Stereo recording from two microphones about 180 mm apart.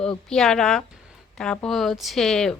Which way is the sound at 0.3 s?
5° left (ahead or behind).